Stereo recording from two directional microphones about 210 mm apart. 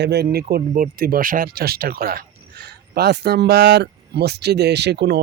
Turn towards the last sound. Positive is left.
turn(degrees=-50)  # may be behind; listen again after turning